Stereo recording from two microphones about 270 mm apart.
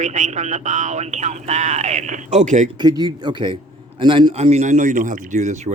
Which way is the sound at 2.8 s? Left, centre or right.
Centre.